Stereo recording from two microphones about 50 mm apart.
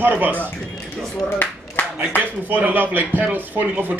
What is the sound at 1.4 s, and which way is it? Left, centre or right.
Clapping, left.